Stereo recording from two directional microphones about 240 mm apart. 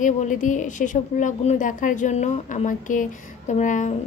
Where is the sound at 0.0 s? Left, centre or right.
Left.